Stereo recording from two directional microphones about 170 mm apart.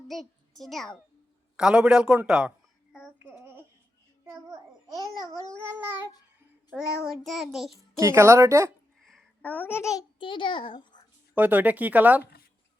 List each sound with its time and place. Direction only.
0.1 s a child's voice: centre (ahead or behind)
2.9 s child singing: 5° right (ahead or behind)
7.3 s a man's voice: centre (ahead or behind)
7.9 s speech: 15° right (ahead or behind)
9.0 s a child's voice: 5° left (ahead or behind); by 11.0 s 30° left (ahead or behind)
11.3 s speech: 10° right (ahead or behind)